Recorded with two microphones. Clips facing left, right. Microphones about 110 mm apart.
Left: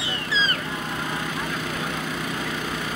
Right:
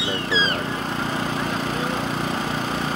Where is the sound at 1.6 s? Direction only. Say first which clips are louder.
Right 4 dB; 30° right (ahead or behind).